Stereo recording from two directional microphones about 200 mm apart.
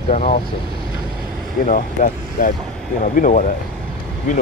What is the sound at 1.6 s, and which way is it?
Speech, 40° left (ahead or behind).